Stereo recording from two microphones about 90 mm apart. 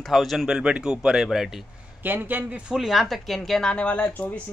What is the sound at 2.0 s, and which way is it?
Speech, 20° right (ahead or behind).